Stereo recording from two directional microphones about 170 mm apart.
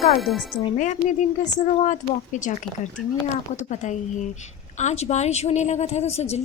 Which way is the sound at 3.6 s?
45° left (ahead or behind).